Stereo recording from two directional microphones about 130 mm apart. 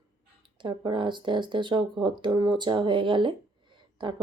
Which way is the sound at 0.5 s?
35° right (ahead or behind).